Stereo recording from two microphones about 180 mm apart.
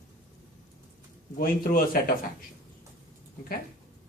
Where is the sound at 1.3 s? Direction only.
55° left (ahead or behind).